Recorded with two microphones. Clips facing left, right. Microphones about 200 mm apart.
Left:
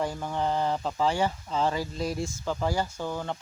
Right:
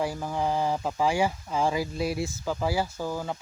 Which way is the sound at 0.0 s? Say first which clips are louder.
Right 1 dB; 5° right (ahead or behind).